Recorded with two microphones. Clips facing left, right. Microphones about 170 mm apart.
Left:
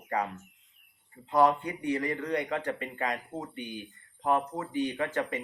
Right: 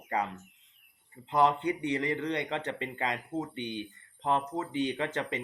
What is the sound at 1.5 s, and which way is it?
Speech, 25° right (ahead or behind).